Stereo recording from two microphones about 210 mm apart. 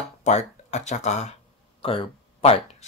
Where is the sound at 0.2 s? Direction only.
30° left (ahead or behind).